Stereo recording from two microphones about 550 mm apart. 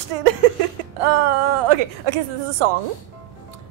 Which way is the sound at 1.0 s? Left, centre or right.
Right.